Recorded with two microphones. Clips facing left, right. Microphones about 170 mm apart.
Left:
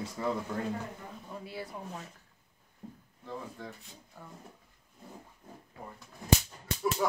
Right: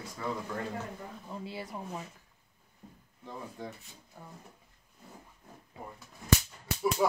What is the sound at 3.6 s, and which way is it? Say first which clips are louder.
Speech: right 2 dB; 15° right (ahead or behind).